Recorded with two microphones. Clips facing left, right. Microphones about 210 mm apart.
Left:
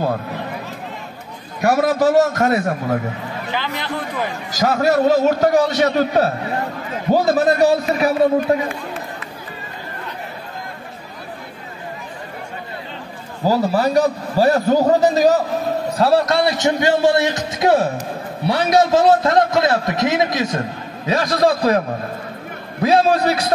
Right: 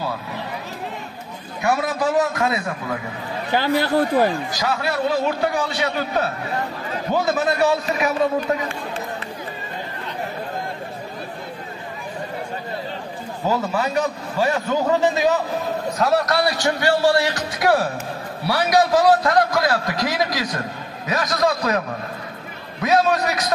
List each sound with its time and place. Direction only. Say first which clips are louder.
1.6 s a man's voice: left 6 dB; 40° left (ahead or behind)
3.5 s speech: right 8 dB; 45° right (ahead or behind)
4.6 s a man's voice: left 7 dB; 45° left (ahead or behind)
13.5 s a man's voice: left 6 dB; 35° left (ahead or behind)